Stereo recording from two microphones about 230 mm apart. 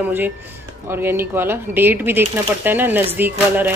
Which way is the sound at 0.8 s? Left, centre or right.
Centre.